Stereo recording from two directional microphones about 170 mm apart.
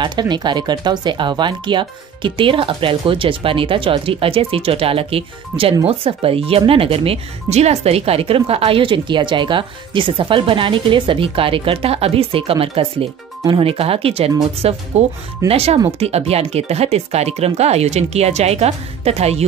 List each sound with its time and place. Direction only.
0.0 s speech: 25° right (ahead or behind)